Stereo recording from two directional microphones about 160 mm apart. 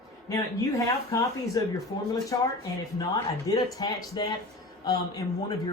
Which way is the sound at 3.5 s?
25° left (ahead or behind).